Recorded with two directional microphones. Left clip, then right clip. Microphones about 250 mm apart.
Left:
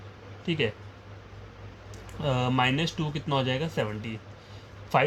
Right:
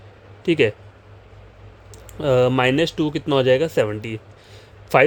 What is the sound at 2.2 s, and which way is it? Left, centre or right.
Speech, right.